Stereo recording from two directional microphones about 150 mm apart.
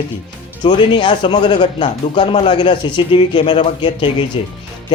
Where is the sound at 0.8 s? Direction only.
35° left (ahead or behind).